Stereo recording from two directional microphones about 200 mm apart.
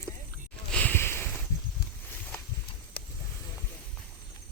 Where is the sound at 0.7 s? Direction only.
5° left (ahead or behind).